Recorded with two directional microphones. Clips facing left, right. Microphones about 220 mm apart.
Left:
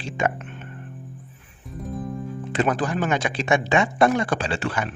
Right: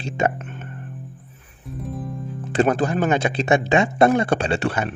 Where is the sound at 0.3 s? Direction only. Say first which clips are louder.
Right 3 dB; 45° right (ahead or behind).